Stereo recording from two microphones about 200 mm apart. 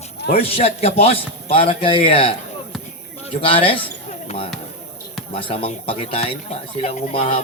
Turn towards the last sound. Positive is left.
turn(degrees=30)  # may be behind; listen again after turning